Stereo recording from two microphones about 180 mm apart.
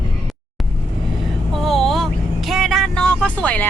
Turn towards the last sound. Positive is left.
turn(degrees=10)  # may be behind; listen again after turning